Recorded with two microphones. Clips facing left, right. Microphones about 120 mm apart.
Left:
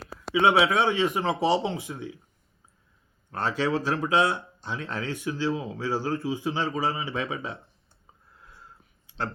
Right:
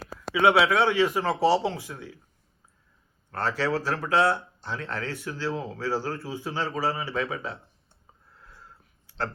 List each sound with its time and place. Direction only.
0.3 s speech: 20° left (ahead or behind)
3.3 s speech: 15° left (ahead or behind)
9.0 s a sound: 15° left (ahead or behind)